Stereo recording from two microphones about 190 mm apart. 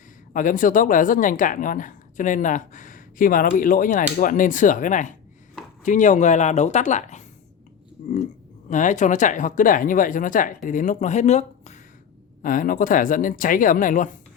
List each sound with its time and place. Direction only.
0.3 s a woman's voice: 45° left (ahead or behind)